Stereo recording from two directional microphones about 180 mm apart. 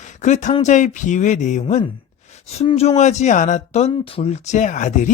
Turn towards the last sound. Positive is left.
turn(degrees=45)  # may be behind; listen again after turning